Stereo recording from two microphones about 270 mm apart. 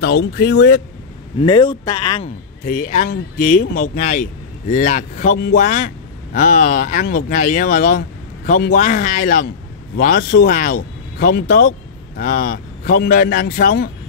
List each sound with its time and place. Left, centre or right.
0.0 s speech: left
1.4 s a man's voice: centre